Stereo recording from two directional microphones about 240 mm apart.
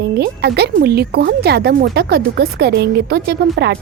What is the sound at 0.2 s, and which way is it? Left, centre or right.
Speech, right.